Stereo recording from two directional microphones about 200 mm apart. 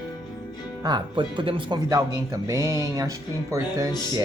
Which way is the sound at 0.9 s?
20° right (ahead or behind).